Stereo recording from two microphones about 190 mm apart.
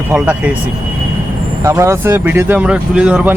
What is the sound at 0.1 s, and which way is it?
Speech, 10° right (ahead or behind).